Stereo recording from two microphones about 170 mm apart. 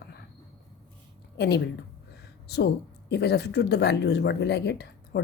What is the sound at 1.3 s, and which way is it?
Speech, 75° left (ahead or behind).